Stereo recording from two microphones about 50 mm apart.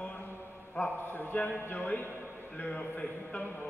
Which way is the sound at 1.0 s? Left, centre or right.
Left.